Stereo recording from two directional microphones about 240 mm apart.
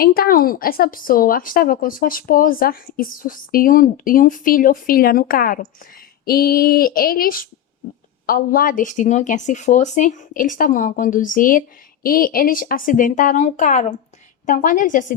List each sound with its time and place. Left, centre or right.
0.0 s speech: left